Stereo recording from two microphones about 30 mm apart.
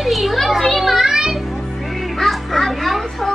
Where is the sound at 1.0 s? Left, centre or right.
Right.